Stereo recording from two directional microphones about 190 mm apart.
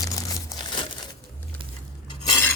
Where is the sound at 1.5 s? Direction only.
10° left (ahead or behind).